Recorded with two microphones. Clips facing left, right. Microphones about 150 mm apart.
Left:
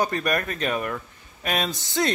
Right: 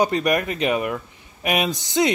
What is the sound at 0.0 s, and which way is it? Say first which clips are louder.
Speech: right 5 dB; 15° right (ahead or behind).